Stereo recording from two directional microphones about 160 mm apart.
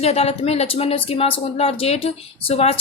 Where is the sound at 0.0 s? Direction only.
40° left (ahead or behind).